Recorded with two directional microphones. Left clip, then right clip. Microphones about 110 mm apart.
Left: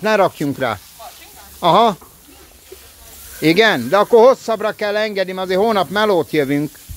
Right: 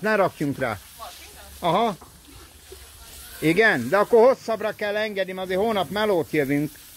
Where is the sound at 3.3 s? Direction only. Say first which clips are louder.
Left 6 dB; 45° left (ahead or behind); by 4.4 s 25° left (ahead or behind).